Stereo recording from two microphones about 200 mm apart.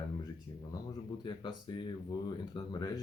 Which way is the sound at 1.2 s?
20° left (ahead or behind).